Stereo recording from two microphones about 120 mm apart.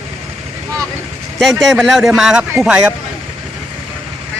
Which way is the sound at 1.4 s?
Centre (ahead or behind).